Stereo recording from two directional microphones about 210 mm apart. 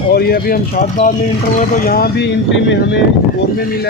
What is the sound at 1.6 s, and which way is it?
Speech, 40° left (ahead or behind).